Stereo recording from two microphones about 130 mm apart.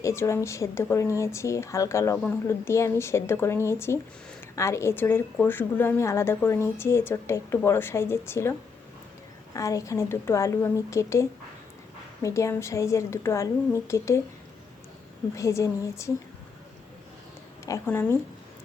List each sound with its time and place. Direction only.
0.0 s a woman's voice: 20° left (ahead or behind)
9.6 s a woman's voice: 25° left (ahead or behind)
15.4 s a woman's voice: 25° left (ahead or behind)
17.8 s speech: 15° left (ahead or behind)